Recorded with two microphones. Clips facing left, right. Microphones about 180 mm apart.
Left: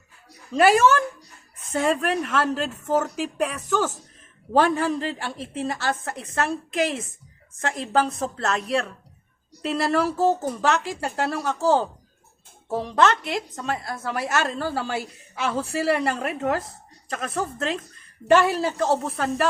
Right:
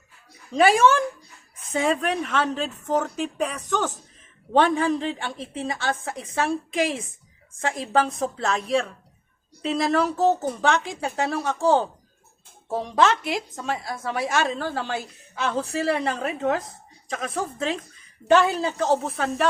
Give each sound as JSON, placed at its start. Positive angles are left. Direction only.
{"t": 0.5, "sound": "a woman's voice", "side_deg": 5}